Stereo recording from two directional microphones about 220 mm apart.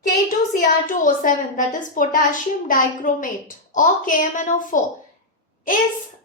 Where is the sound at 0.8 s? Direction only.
35° left (ahead or behind).